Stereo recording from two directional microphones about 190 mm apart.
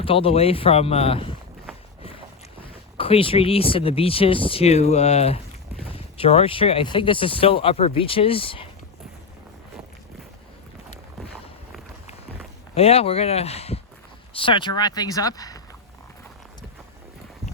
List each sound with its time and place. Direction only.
0.0 s speech: 30° left (ahead or behind)
3.0 s speech: 30° left (ahead or behind)
12.7 s speech: 30° left (ahead or behind)